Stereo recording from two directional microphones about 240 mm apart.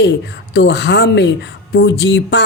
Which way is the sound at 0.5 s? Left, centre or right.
Left.